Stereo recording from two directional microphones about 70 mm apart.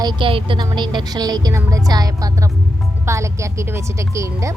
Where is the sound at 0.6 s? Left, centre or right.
Right.